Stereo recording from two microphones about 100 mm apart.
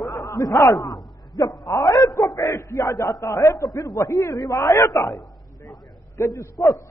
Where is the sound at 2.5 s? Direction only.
35° left (ahead or behind).